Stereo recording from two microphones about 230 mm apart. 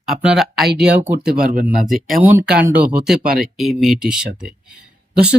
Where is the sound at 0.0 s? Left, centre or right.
Centre.